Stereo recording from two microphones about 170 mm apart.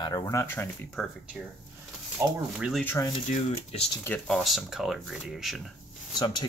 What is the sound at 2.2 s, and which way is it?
Speech, 15° right (ahead or behind).